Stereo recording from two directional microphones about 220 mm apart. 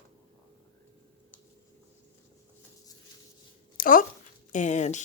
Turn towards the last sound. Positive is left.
turn(degrees=30)  # may be behind; listen again after turning